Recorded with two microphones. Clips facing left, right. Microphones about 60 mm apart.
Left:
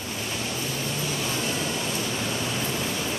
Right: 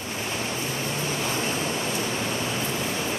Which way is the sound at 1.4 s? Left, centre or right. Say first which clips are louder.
Right 1 dB; right.